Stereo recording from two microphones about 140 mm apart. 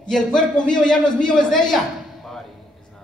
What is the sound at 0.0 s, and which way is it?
A man's voice, 5° left (ahead or behind).